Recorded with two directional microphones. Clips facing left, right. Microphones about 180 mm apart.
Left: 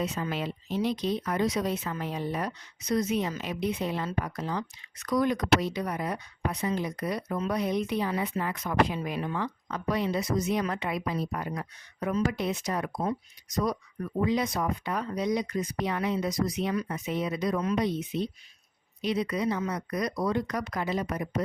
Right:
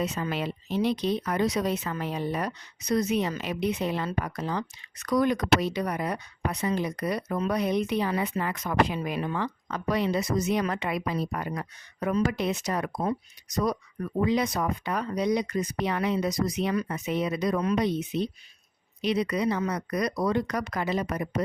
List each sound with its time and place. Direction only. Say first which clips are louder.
0.0 s speech: right 2 dB; 75° right (ahead or behind)